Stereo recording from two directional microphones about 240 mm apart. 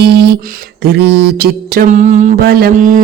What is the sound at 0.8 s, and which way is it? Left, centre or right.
Speech, right.